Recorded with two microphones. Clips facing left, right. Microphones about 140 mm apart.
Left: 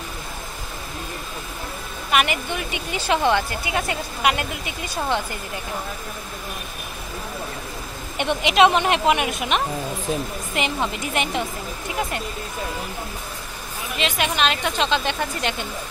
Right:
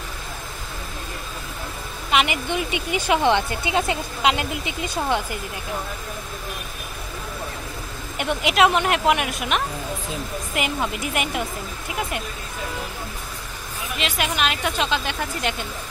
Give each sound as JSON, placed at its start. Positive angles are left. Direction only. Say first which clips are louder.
{"t": 2.0, "sound": "speech", "louder": "even", "side_deg": -20}
{"t": 8.2, "sound": "speech", "louder": "left 2 dB", "side_deg": -5}
{"t": 13.9, "sound": "speech", "louder": "left 2 dB", "side_deg": 0}